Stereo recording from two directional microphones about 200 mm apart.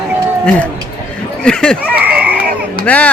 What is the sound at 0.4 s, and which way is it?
Speech, 5° left (ahead or behind).